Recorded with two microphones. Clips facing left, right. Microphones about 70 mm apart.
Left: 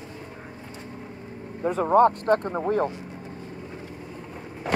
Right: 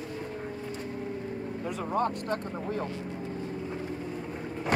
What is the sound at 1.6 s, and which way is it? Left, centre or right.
Speech, left.